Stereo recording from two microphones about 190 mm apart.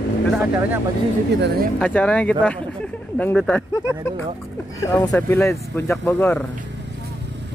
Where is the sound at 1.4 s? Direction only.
55° right (ahead or behind).